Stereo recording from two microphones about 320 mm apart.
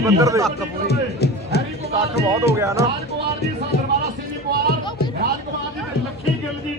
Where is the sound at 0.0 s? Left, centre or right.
Centre.